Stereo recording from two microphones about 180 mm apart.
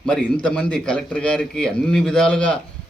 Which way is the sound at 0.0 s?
5° left (ahead or behind).